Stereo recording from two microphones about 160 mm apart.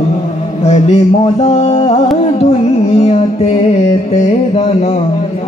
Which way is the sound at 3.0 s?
40° left (ahead or behind).